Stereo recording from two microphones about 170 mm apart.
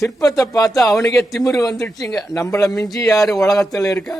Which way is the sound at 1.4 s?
20° left (ahead or behind).